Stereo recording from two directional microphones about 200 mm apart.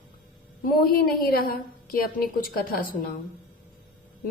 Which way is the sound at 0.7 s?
50° left (ahead or behind).